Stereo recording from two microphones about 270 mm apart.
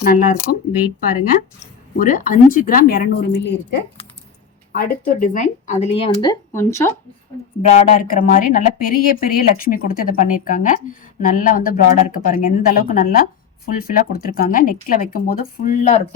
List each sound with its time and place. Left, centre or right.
0.0 s speech: left
2.0 s speech: left; by 6.9 s centre
7.6 s speech: left